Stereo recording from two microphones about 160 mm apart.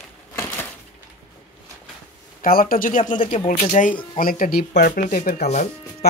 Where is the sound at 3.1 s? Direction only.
35° left (ahead or behind).